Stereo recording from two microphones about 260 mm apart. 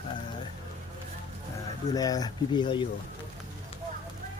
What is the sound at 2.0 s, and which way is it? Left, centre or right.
Speech, centre.